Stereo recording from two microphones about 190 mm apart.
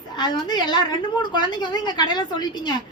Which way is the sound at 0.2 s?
25° left (ahead or behind).